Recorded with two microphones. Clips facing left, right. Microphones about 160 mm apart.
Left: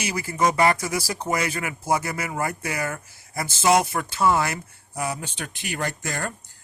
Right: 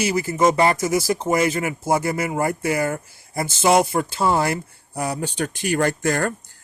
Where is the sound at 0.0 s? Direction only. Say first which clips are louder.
Right 5 dB; 30° right (ahead or behind).